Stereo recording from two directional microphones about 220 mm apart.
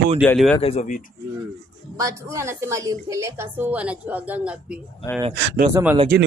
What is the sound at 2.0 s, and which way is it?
A woman's voice, 15° right (ahead or behind).